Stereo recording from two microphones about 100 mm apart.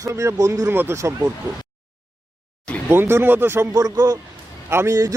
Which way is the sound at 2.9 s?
25° right (ahead or behind).